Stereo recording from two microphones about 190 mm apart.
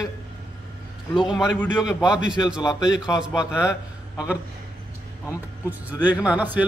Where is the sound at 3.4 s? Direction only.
15° left (ahead or behind).